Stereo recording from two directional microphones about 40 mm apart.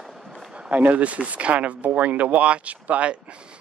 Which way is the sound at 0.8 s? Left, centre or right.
Right.